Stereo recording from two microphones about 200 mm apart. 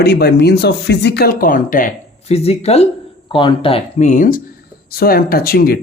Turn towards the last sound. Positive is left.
turn(degrees=50)  # may be behind; listen again after turning